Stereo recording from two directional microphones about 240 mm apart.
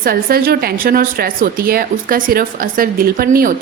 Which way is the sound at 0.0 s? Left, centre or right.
Right.